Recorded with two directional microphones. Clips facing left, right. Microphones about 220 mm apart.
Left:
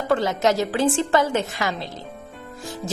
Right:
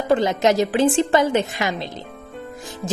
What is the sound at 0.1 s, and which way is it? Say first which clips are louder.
A woman's voice: right 3 dB; 15° right (ahead or behind).